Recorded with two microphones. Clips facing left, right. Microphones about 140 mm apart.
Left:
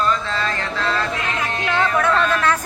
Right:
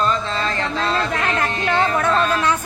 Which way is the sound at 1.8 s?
25° right (ahead or behind).